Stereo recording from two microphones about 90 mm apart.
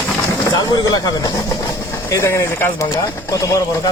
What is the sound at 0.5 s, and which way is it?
Speech, 45° left (ahead or behind).